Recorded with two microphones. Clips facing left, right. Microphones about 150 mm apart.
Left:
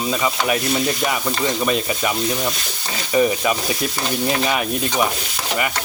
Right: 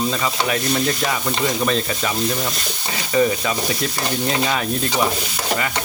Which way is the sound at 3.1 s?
15° left (ahead or behind).